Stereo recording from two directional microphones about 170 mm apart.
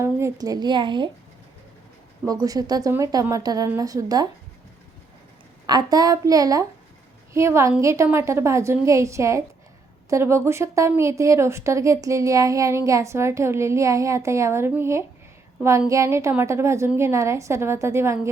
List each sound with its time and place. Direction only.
0.0 s a woman's voice: 15° right (ahead or behind)
2.2 s a woman's voice: 20° right (ahead or behind)
5.6 s a woman's voice: 25° right (ahead or behind)